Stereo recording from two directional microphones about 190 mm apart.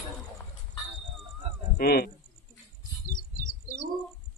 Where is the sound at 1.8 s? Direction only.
55° left (ahead or behind).